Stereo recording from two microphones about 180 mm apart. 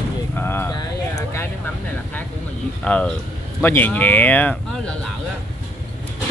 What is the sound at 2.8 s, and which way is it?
Speech, 5° left (ahead or behind).